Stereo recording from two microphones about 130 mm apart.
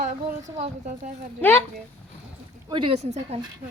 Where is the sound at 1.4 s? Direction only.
15° left (ahead or behind).